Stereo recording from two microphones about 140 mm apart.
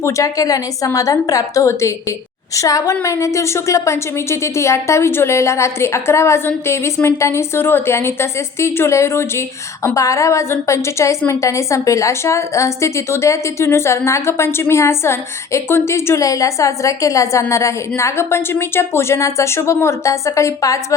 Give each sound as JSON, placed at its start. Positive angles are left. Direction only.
{"t": 0.0, "sound": "a woman's voice", "side_deg": 25}